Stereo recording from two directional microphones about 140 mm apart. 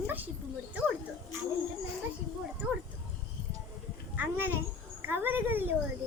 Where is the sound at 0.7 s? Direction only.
10° right (ahead or behind).